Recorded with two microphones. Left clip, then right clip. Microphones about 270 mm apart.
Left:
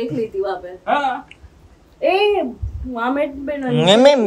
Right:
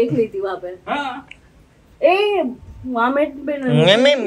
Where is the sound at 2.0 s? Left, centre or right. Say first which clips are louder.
Right 1 dB; right.